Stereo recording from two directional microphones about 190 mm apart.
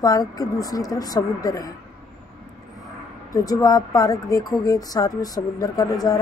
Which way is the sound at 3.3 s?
20° left (ahead or behind).